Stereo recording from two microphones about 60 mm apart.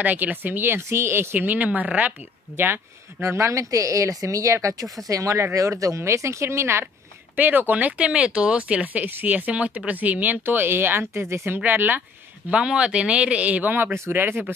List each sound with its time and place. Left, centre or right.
0.0 s speech: right
2.5 s speech: right
3.2 s speech: right
7.3 s speech: right
11.6 s speech: right
12.4 s speech: centre
14.1 s speech: right